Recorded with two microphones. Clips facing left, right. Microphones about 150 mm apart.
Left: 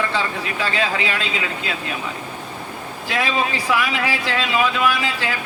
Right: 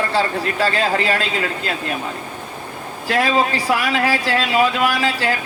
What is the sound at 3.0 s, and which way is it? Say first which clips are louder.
A man's voice: right 5 dB; 40° right (ahead or behind).